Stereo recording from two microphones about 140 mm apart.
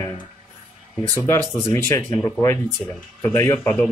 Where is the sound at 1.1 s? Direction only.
15° left (ahead or behind).